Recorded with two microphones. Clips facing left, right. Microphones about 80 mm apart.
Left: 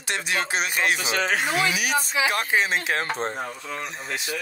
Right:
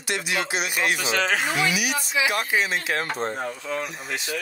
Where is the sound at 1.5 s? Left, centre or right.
Left.